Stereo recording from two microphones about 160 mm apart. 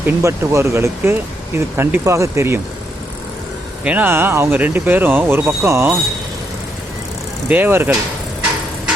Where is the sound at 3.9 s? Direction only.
10° right (ahead or behind).